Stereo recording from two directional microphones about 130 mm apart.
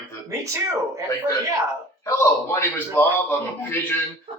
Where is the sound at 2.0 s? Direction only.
20° left (ahead or behind).